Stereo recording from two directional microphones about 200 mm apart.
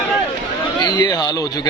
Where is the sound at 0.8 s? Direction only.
20° left (ahead or behind).